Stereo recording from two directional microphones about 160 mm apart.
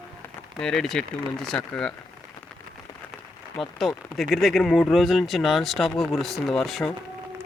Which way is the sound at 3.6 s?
Centre (ahead or behind).